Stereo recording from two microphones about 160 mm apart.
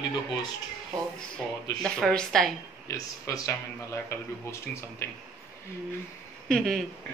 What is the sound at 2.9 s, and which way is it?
Speech, 20° left (ahead or behind).